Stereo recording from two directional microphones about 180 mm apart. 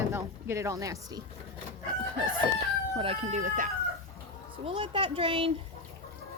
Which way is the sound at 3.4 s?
45° right (ahead or behind).